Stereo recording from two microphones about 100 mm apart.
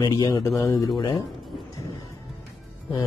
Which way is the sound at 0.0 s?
40° left (ahead or behind).